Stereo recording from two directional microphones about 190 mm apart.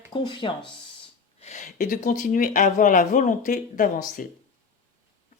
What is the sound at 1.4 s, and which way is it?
Speech, 40° left (ahead or behind).